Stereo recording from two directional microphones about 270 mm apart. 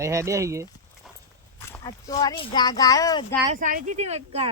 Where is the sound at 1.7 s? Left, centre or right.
Centre.